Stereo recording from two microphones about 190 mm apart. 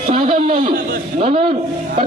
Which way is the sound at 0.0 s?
30° right (ahead or behind).